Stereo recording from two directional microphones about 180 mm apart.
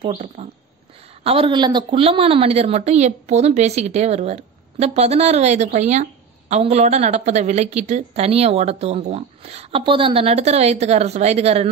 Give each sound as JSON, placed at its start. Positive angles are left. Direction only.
{"t": 0.0, "sound": "a woman's voice", "side_deg": -35}